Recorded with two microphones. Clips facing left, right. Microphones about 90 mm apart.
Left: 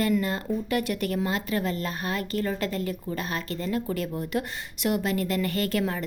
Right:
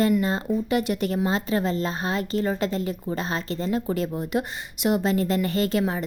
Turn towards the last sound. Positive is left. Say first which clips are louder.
# right 3 dB
turn(degrees=-20)  # may be behind; listen again after turning